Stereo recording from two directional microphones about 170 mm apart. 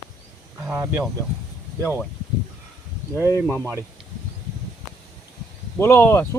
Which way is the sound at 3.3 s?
10° left (ahead or behind).